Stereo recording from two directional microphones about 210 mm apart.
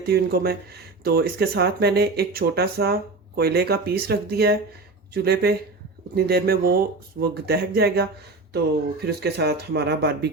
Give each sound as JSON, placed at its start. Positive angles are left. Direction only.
{"t": 0.0, "sound": "speech", "side_deg": -45}